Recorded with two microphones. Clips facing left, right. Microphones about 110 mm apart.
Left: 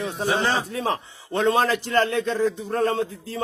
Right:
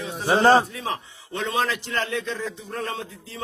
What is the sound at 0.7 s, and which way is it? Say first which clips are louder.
A man's voice: left 5 dB; 40° left (ahead or behind).